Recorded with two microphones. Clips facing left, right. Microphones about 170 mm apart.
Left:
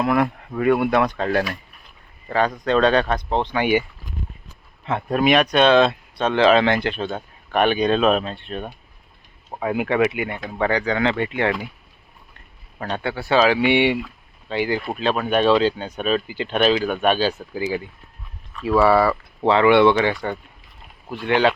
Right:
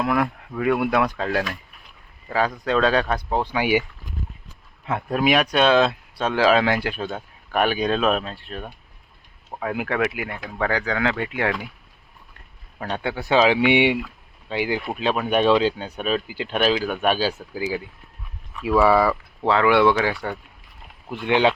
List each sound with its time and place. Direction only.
0.0 s speech: centre (ahead or behind)
5.1 s speech: 5° right (ahead or behind)
12.8 s speech: 10° right (ahead or behind)
21.2 s speech: 15° right (ahead or behind)